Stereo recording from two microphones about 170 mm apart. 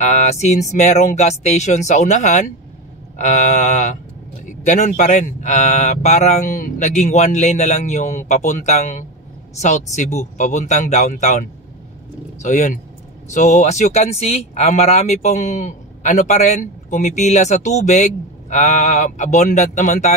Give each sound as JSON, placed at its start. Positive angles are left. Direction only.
{"t": 0.0, "sound": "speech", "side_deg": 45}